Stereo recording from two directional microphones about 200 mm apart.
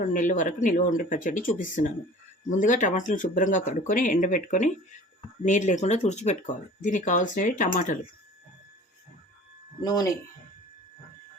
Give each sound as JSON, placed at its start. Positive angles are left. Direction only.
{"t": 0.0, "sound": "speech", "side_deg": 40}
{"t": 9.8, "sound": "speech", "side_deg": 20}